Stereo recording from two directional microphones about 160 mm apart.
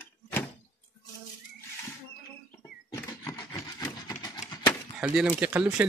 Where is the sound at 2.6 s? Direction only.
20° left (ahead or behind).